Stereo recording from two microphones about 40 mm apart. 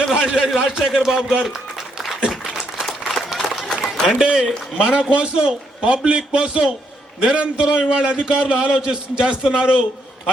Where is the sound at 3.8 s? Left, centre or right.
Centre.